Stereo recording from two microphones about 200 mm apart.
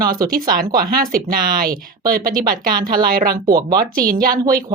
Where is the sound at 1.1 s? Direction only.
45° right (ahead or behind).